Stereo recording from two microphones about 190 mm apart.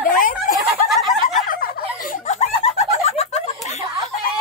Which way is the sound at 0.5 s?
Centre (ahead or behind).